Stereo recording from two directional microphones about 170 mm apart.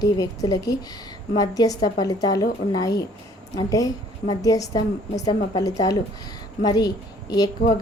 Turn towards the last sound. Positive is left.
turn(degrees=20)  # may be behind; listen again after turning